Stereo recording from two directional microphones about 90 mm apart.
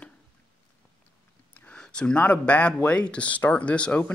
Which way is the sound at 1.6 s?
10° left (ahead or behind).